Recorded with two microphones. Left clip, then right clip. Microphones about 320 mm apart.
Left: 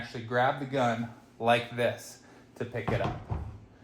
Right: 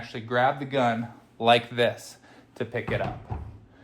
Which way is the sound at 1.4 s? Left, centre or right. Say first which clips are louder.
Right 5 dB; right.